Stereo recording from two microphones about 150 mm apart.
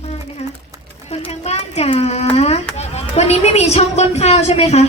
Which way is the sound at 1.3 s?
45° left (ahead or behind).